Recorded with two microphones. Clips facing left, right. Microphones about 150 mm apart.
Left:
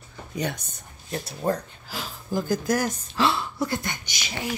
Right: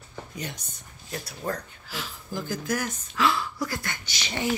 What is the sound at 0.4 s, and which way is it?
Speech, 65° left (ahead or behind).